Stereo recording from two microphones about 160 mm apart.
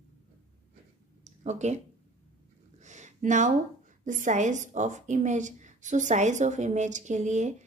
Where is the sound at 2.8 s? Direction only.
50° right (ahead or behind).